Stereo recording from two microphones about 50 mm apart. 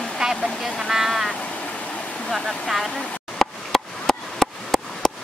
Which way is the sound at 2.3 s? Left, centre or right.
Centre.